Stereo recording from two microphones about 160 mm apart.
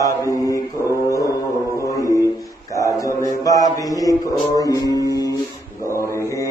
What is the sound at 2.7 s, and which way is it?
Mantra, 20° left (ahead or behind).